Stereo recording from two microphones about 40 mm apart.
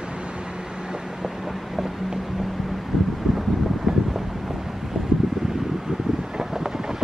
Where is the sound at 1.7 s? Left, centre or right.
Centre.